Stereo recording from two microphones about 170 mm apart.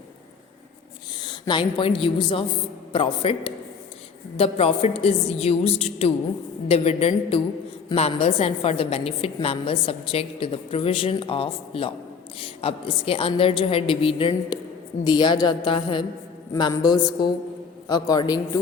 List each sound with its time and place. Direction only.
1.2 s a woman's voice: 25° left (ahead or behind)